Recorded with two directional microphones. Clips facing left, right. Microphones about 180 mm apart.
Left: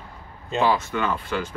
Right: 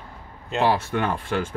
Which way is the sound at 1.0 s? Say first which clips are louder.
Right 1 dB; 50° right (ahead or behind).